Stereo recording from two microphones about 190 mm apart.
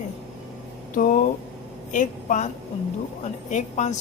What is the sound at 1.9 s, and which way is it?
Speech, 40° left (ahead or behind).